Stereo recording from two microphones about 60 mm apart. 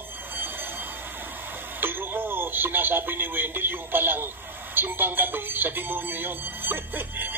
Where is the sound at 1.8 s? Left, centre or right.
Right.